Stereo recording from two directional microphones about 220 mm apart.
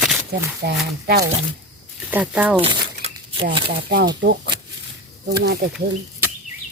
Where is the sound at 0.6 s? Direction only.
45° right (ahead or behind).